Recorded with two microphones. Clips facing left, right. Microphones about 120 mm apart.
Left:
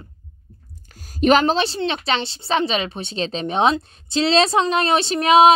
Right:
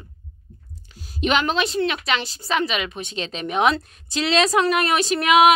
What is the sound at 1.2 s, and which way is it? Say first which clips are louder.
Speech: left 5 dB; 40° left (ahead or behind).